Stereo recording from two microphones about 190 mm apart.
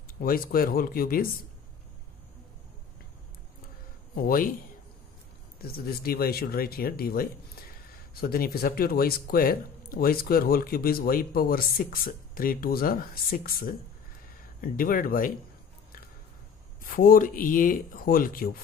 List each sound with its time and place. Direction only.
0.2 s speech: 50° left (ahead or behind)
4.1 s speech: 50° left (ahead or behind)
5.6 s speech: 55° left (ahead or behind)
16.8 s speech: 50° left (ahead or behind)